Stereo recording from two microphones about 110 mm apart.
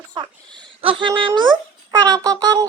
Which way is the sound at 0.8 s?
55° right (ahead or behind).